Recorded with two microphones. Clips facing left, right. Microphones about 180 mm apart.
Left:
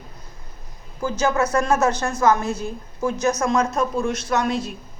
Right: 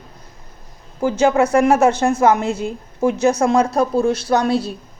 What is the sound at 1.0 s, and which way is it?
Speech, 25° right (ahead or behind).